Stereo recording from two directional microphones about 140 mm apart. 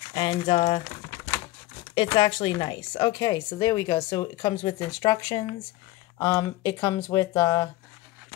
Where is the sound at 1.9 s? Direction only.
35° left (ahead or behind).